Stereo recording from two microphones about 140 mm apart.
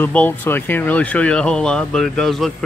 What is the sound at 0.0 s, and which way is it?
Speech, 15° left (ahead or behind).